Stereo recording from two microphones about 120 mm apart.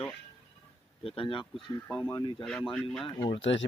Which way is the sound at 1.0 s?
50° left (ahead or behind).